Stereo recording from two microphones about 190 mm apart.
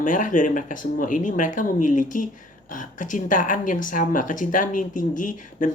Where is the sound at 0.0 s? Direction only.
45° left (ahead or behind).